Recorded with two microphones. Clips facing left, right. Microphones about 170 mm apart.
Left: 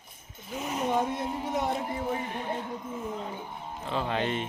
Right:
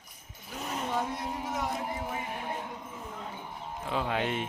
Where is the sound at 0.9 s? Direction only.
25° left (ahead or behind).